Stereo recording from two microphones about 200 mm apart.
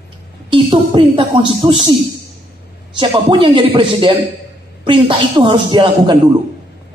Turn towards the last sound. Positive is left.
turn(degrees=-25)  # may be behind; listen again after turning